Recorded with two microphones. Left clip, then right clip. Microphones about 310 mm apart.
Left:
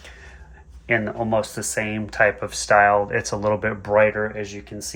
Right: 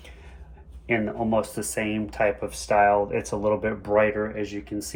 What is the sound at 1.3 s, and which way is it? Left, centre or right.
Speech, left.